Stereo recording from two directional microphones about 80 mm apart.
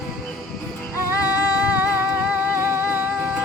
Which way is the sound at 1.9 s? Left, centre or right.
Right.